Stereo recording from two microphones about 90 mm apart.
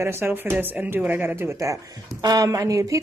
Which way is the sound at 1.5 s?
35° right (ahead or behind).